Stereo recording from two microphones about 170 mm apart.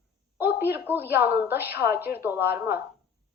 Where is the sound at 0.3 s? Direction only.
10° right (ahead or behind).